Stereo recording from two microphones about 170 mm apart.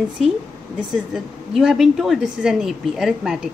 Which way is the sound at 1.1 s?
5° right (ahead or behind).